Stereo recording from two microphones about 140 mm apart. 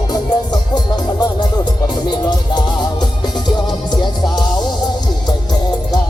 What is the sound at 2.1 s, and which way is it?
Music, 30° left (ahead or behind).